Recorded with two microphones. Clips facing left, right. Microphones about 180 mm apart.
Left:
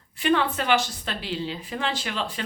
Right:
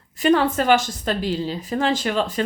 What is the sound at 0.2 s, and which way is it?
Speech, 45° right (ahead or behind).